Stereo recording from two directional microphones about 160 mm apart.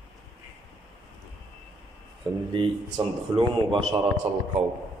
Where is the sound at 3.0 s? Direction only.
30° right (ahead or behind).